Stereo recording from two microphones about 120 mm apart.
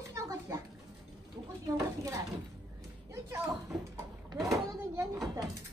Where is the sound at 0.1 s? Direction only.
25° right (ahead or behind).